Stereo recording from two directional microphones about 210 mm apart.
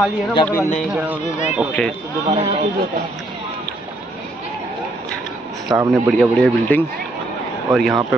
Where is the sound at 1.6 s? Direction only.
5° left (ahead or behind).